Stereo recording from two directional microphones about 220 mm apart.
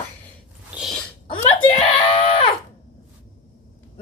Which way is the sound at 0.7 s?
5° right (ahead or behind).